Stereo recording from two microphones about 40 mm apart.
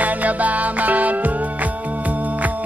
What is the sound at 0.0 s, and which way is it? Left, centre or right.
Music, right.